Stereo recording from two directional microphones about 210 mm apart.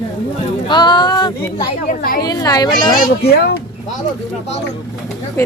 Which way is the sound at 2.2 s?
20° left (ahead or behind).